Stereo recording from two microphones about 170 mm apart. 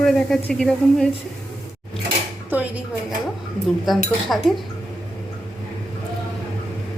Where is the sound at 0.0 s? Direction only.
5° left (ahead or behind).